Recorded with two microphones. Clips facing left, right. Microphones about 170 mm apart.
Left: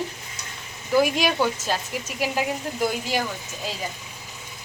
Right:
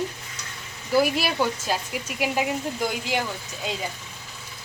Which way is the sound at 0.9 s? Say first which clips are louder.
Left 1 dB; 5° right (ahead or behind).